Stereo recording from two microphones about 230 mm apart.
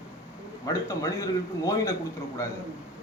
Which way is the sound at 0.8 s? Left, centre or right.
Centre.